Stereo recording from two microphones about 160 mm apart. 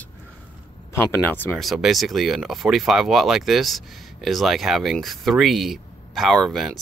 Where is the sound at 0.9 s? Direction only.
15° left (ahead or behind).